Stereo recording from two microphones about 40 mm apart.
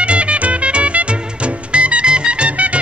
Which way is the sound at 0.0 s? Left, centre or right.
Right.